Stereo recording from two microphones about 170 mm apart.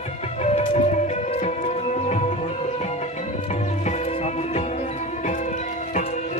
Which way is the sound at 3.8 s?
40° left (ahead or behind).